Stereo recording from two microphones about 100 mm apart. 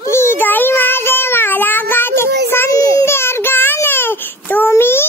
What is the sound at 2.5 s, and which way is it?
Child singing, 25° left (ahead or behind).